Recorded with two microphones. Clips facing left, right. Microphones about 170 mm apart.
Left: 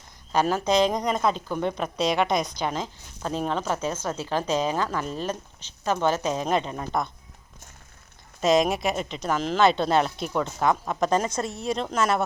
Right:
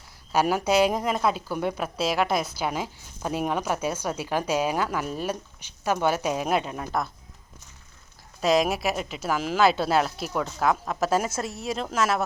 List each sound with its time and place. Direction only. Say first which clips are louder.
0.3 s speech: even; 10° right (ahead or behind)
8.4 s speech: left 1 dB; centre (ahead or behind)